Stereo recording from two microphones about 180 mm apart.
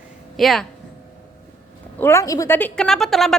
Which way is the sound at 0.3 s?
Centre (ahead or behind).